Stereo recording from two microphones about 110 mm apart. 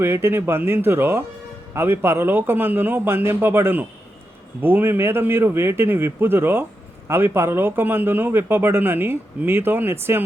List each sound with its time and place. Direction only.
0.0 s a man's voice: 20° right (ahead or behind)